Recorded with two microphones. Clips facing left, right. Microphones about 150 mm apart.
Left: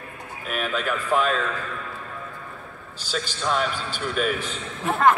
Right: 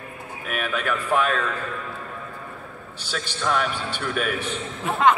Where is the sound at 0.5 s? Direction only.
55° right (ahead or behind).